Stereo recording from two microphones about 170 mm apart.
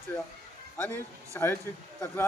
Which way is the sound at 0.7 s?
10° left (ahead or behind).